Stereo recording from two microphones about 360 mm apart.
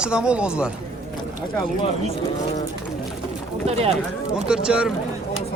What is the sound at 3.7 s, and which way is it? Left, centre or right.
Speech, centre.